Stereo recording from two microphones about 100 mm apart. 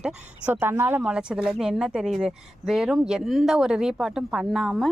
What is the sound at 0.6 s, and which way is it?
Speech, 25° right (ahead or behind).